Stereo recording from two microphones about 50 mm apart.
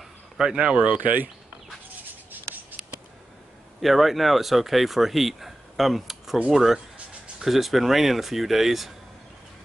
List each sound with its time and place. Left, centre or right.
0.6 s speech: right
2.4 s writing: right
3.8 s speech: centre